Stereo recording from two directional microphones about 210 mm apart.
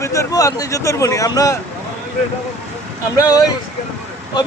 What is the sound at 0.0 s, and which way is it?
Speech, 15° left (ahead or behind).